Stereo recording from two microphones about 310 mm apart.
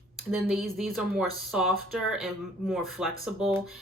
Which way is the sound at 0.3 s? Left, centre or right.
Centre.